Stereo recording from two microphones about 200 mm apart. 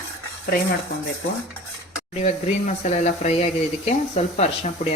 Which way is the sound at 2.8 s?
35° left (ahead or behind).